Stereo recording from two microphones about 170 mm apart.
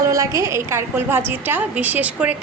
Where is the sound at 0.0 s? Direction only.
20° right (ahead or behind).